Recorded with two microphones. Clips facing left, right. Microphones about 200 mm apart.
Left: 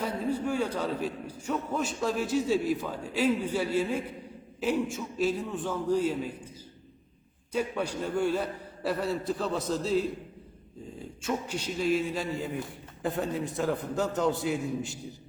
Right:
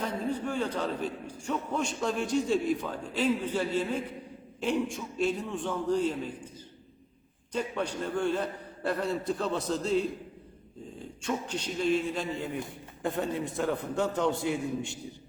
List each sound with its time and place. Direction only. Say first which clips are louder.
0.0 s a man's voice: left 2 dB; 10° left (ahead or behind)
7.5 s a man's voice: left 2 dB; 10° left (ahead or behind)
11.2 s a man's voice: left 1 dB; 10° left (ahead or behind)